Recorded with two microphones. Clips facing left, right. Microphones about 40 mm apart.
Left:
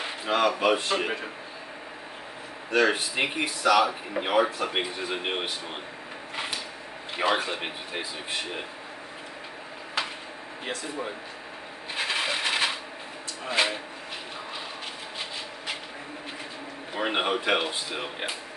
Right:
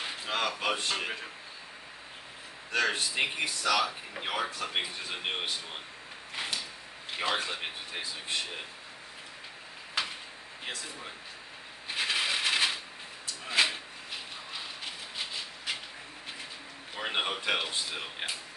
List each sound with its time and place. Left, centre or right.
0.0 s speech: centre
2.7 s speech: centre
6.3 s a sound: centre
7.2 s speech: centre
11.9 s a sound: centre
16.9 s speech: centre